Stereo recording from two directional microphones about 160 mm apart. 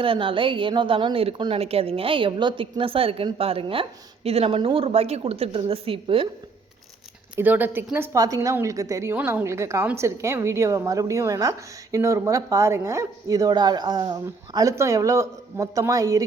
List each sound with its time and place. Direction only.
0.0 s a woman's voice: 35° right (ahead or behind)
7.3 s a woman's voice: 10° right (ahead or behind)